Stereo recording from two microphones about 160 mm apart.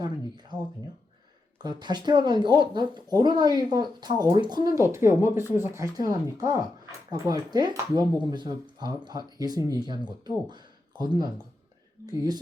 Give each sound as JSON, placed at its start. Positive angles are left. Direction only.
{"t": 0.0, "sound": "speech", "side_deg": -25}
{"t": 1.6, "sound": "speech", "side_deg": -25}